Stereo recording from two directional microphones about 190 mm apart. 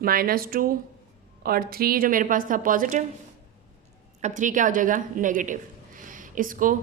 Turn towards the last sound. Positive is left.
turn(degrees=-45)  # may be behind; listen again after turning